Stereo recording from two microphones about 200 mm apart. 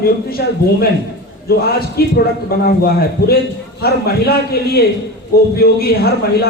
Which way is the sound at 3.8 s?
50° left (ahead or behind).